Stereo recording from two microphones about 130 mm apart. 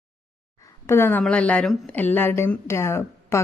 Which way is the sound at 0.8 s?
20° left (ahead or behind).